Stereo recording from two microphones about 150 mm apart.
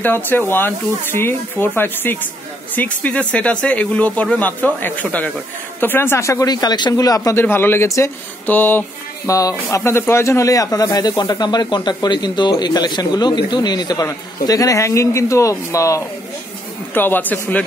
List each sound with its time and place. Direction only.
0.0 s speech: 15° left (ahead or behind)